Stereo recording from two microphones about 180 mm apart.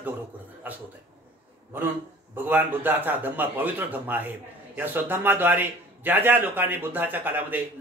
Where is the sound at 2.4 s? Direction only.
10° right (ahead or behind).